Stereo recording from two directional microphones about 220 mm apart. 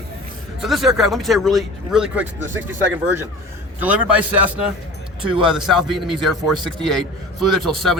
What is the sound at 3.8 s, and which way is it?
A man's voice, 5° right (ahead or behind).